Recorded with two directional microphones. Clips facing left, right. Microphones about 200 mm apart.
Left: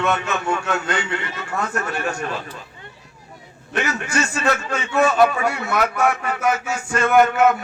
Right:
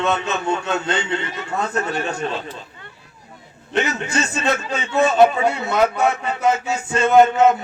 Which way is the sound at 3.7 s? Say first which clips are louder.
Right 2 dB; 20° right (ahead or behind).